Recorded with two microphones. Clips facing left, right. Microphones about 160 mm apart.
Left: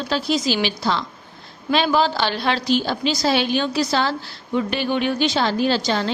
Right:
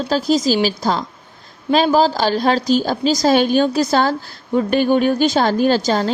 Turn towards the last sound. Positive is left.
turn(degrees=-45)  # may be behind; listen again after turning